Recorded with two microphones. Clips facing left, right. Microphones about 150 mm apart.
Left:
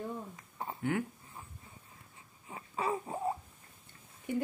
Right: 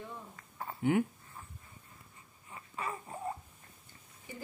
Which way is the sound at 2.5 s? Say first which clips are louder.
Left 6 dB; 25° left (ahead or behind).